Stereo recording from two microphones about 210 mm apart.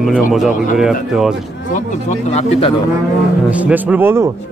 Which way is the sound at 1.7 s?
35° left (ahead or behind).